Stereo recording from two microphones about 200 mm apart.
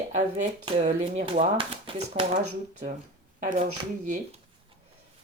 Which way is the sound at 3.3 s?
40° right (ahead or behind).